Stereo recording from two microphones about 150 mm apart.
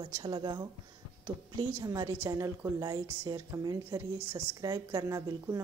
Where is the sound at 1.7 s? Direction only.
25° right (ahead or behind).